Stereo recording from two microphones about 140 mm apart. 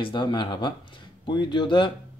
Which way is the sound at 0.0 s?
35° left (ahead or behind).